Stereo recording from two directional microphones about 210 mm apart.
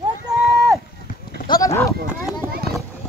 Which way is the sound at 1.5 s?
15° left (ahead or behind).